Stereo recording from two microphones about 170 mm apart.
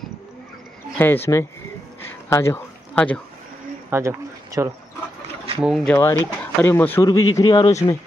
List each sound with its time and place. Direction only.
0.9 s speech: 10° left (ahead or behind)
2.2 s a sound: 15° left (ahead or behind)
3.9 s speech: 20° right (ahead or behind)
5.6 s speech: 5° right (ahead or behind)
5.9 s speech: 15° left (ahead or behind)
7.1 s speech: 25° left (ahead or behind)